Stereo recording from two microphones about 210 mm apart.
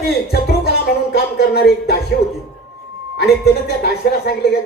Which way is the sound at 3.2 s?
50° left (ahead or behind).